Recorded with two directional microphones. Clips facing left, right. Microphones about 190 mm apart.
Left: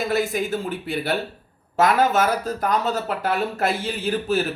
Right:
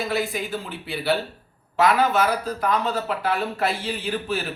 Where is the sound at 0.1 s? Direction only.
45° left (ahead or behind).